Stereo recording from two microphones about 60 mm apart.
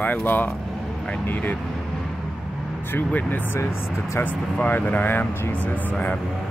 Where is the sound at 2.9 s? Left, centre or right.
Left.